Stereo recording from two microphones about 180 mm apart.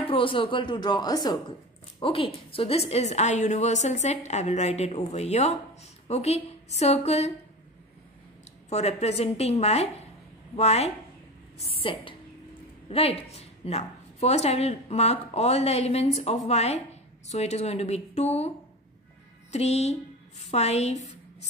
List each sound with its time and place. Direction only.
0.0 s a woman's voice: 30° left (ahead or behind)
8.6 s a woman's voice: 35° left (ahead or behind)
19.5 s a woman's voice: 35° left (ahead or behind)